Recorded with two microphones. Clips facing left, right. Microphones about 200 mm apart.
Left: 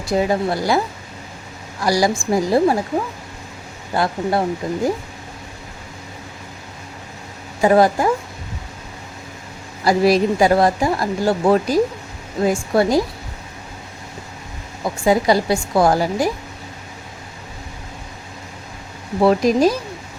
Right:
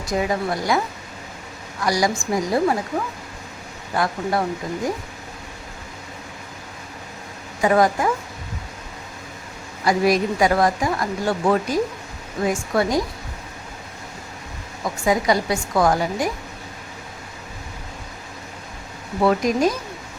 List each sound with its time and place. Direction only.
0.1 s speech: 30° left (ahead or behind)
1.8 s speech: 30° left (ahead or behind)
3.9 s speech: 30° left (ahead or behind)
7.6 s speech: 30° left (ahead or behind)
9.8 s speech: 30° left (ahead or behind)
15.0 s speech: 30° left (ahead or behind)
19.2 s speech: 30° left (ahead or behind)